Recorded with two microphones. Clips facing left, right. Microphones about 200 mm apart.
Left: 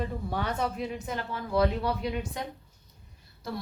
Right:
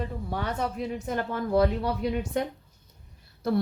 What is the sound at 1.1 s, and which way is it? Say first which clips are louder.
A woman's voice: right 5 dB; 50° right (ahead or behind).